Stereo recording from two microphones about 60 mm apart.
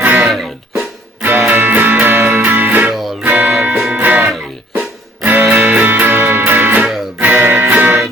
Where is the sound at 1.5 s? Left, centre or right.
Right.